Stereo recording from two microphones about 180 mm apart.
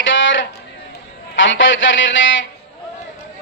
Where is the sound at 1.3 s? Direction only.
90° left.